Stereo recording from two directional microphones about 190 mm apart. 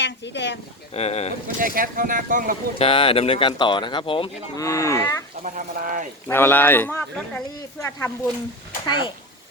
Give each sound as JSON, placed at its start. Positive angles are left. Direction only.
{"t": 0.0, "sound": "a woman's voice", "side_deg": 65}
{"t": 0.9, "sound": "speech", "side_deg": 35}
{"t": 1.5, "sound": "speech", "side_deg": -50}
{"t": 2.7, "sound": "speech", "side_deg": 30}
{"t": 4.6, "sound": "speech", "side_deg": 15}
{"t": 5.4, "sound": "speech", "side_deg": -45}
{"t": 6.2, "sound": "speech", "side_deg": 10}
{"t": 8.9, "sound": "speech", "side_deg": 25}